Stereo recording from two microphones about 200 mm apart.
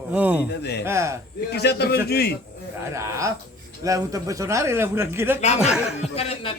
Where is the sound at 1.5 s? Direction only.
55° left (ahead or behind).